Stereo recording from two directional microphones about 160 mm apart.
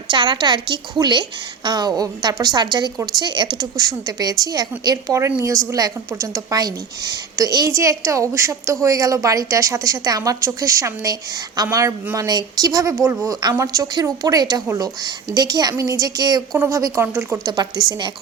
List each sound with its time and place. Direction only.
0.1 s a woman's voice: 30° right (ahead or behind)